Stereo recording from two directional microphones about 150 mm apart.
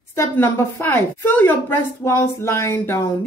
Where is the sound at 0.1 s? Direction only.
15° left (ahead or behind).